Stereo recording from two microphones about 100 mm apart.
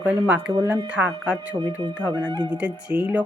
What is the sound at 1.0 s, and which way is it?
Speech, 10° right (ahead or behind).